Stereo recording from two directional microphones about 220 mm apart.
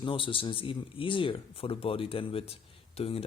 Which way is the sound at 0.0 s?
20° left (ahead or behind).